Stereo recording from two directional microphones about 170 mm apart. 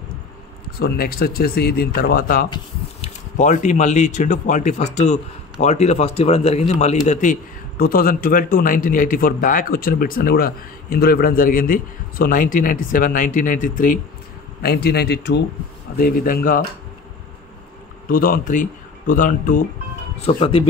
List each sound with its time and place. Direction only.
0.7 s a man's voice: 65° left (ahead or behind)
3.0 s a man's voice: 45° left (ahead or behind)
14.6 s speech: 70° left (ahead or behind)
16.0 s a man's voice: 55° left (ahead or behind)
18.0 s speech: 55° left (ahead or behind)
20.2 s speech: 30° left (ahead or behind)